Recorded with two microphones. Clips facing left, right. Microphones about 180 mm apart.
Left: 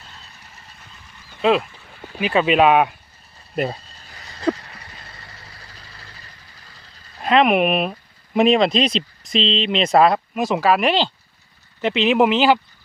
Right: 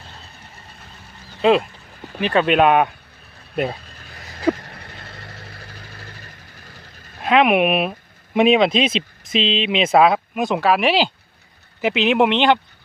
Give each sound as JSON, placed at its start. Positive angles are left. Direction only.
{"t": 1.4, "sound": "speech", "side_deg": 0}
{"t": 3.8, "sound": "a sound", "side_deg": -60}
{"t": 4.5, "sound": "vehicle", "side_deg": -55}
{"t": 7.2, "sound": "speech", "side_deg": -5}